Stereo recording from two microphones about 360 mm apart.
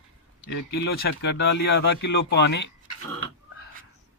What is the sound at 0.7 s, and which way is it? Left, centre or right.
Speech, left.